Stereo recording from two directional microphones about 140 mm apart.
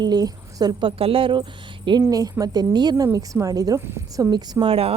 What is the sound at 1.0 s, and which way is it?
Speech, 40° right (ahead or behind).